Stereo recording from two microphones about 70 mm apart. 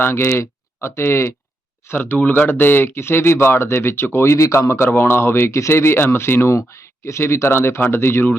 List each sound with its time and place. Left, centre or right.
0.0 s speech: left
1.9 s speech: left